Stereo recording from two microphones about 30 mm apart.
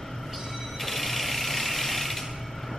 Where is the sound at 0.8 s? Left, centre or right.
Centre.